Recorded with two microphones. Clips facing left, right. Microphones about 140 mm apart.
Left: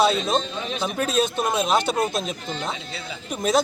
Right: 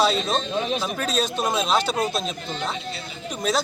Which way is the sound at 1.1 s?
50° left (ahead or behind).